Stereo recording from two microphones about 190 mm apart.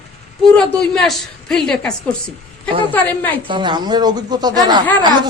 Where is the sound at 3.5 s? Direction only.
25° right (ahead or behind).